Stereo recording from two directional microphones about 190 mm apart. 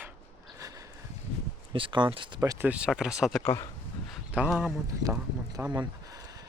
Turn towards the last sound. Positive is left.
turn(degrees=-20)  # may be behind; listen again after turning